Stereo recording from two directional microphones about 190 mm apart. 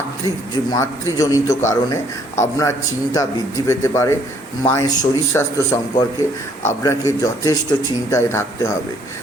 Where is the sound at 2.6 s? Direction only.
20° left (ahead or behind).